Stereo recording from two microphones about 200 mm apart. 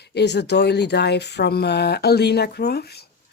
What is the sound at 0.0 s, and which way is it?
Speech, 55° left (ahead or behind).